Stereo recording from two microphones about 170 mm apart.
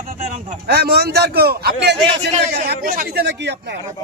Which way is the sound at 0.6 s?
70° right (ahead or behind).